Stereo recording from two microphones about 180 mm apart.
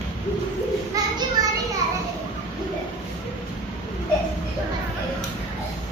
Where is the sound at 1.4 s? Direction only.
20° right (ahead or behind).